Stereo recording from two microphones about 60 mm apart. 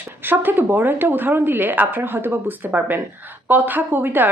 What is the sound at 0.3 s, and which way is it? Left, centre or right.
Speech, right.